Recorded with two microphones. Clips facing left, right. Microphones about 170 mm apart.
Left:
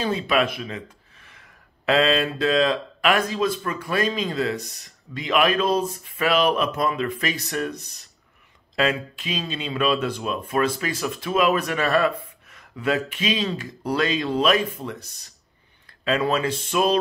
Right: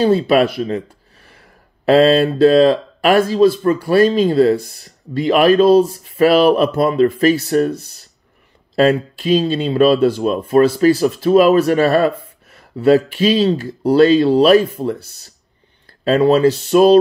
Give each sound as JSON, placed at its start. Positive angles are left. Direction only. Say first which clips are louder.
{"t": 0.0, "sound": "speech", "louder": "right 10 dB", "side_deg": -35}
{"t": 8.7, "sound": "speech", "louder": "right 10 dB", "side_deg": -40}